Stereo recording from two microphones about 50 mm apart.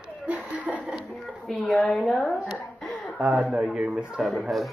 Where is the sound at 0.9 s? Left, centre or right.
Centre.